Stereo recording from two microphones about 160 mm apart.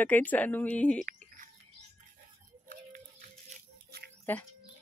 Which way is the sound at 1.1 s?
55° right (ahead or behind).